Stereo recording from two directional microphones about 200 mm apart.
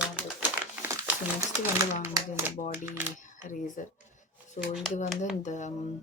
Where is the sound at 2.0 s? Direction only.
15° right (ahead or behind).